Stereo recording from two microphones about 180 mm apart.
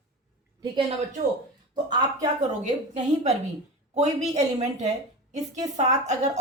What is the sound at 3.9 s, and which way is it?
A woman's voice, 40° right (ahead or behind).